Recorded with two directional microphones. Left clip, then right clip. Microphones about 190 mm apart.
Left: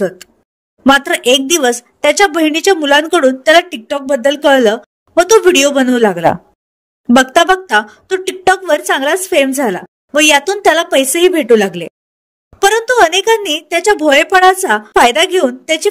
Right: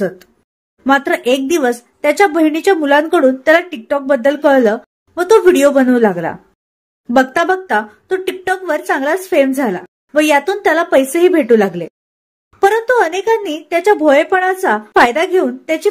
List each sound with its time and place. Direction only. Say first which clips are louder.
0.8 s a man's voice: left 3 dB; 45° left (ahead or behind)